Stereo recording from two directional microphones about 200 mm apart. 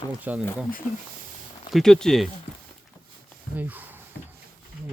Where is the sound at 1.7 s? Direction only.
Centre (ahead or behind).